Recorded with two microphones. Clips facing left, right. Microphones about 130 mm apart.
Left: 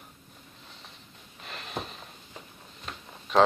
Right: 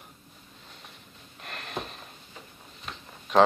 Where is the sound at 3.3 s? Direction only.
Centre (ahead or behind).